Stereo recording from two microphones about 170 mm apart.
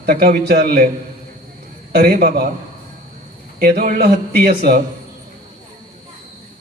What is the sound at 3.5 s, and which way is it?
A man's voice, 60° right (ahead or behind).